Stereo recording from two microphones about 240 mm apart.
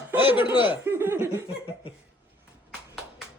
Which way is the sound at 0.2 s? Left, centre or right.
Centre.